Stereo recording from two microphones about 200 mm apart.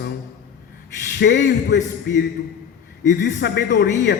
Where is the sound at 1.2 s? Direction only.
60° left (ahead or behind).